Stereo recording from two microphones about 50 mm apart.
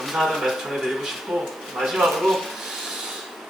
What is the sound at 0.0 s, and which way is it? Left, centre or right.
Speech, centre.